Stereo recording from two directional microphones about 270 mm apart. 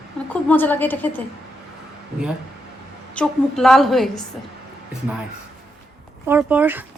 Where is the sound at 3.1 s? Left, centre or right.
Centre.